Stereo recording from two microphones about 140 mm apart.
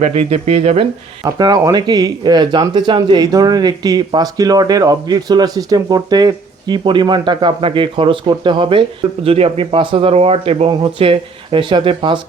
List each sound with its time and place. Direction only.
0.0 s speech: 50° right (ahead or behind)
1.2 s speech: 30° right (ahead or behind)